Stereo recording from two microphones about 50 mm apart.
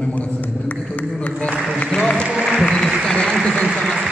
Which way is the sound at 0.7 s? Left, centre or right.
Left.